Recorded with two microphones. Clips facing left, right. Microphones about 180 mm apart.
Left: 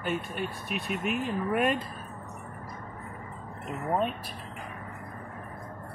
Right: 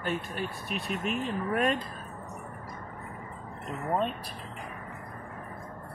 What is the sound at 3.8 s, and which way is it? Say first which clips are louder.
Speech: left 1 dB; 5° left (ahead or behind).